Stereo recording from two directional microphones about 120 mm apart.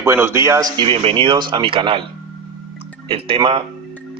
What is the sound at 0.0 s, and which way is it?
Speech, 20° right (ahead or behind).